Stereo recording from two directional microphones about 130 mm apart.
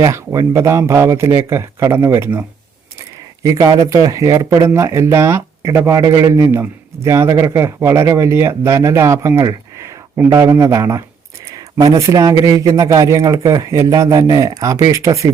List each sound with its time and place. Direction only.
0.0 s speech: 25° right (ahead or behind)
3.4 s speech: 25° right (ahead or behind)